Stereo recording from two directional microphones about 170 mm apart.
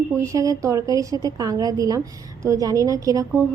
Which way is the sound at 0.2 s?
20° right (ahead or behind).